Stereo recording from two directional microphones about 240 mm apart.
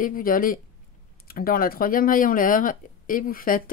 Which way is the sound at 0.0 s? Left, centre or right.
Left.